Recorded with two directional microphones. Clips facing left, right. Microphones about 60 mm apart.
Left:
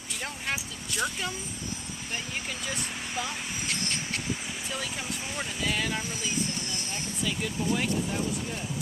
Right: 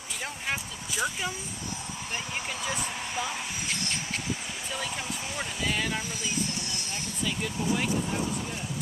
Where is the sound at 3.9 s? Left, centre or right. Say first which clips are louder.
Even; centre.